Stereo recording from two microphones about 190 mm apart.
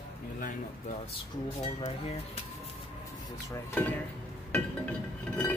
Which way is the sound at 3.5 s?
10° left (ahead or behind).